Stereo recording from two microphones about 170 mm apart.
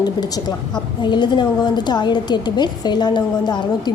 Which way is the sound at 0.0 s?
25° left (ahead or behind).